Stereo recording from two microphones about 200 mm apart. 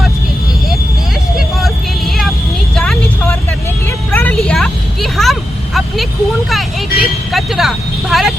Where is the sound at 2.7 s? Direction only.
5° left (ahead or behind).